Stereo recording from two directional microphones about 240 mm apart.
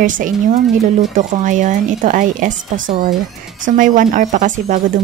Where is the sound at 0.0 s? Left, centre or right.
Right.